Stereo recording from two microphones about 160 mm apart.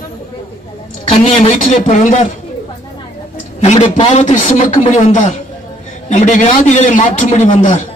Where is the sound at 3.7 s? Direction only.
35° left (ahead or behind).